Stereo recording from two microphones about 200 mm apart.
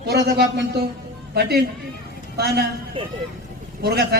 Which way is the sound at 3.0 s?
25° right (ahead or behind).